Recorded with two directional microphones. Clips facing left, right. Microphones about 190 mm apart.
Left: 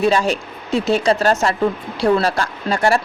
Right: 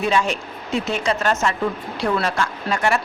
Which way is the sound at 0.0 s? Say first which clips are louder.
Left 4 dB; 35° left (ahead or behind).